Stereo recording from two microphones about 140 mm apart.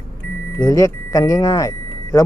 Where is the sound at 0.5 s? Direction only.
25° left (ahead or behind).